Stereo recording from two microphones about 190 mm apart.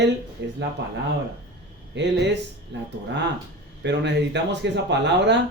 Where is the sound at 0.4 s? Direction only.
65° right (ahead or behind).